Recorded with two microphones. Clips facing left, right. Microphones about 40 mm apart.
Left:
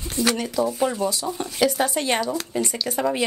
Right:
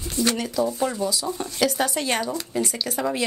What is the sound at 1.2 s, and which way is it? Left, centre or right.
Speech, centre.